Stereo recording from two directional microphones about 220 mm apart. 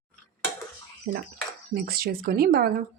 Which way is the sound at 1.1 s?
40° right (ahead or behind).